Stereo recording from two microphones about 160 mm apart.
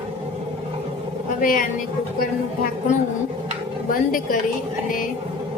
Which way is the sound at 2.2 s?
65° left (ahead or behind).